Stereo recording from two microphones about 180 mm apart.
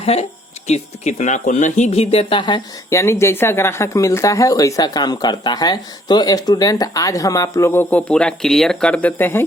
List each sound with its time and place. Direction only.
0.0 s speech: 35° left (ahead or behind); by 9.4 s 10° left (ahead or behind)